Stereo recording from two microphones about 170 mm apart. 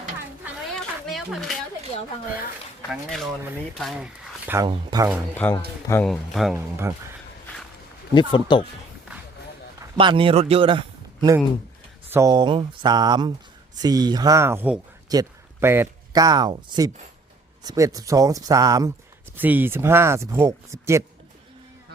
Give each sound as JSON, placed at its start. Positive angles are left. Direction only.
{"t": 0.8, "sound": "a sound", "side_deg": 0}
{"t": 2.9, "sound": "speech", "side_deg": 0}
{"t": 4.4, "sound": "speech", "side_deg": -15}
{"t": 5.4, "sound": "speech", "side_deg": 10}
{"t": 6.6, "sound": "speech", "side_deg": -15}
{"t": 8.1, "sound": "speech", "side_deg": 30}
{"t": 10.0, "sound": "a man's voice", "side_deg": -30}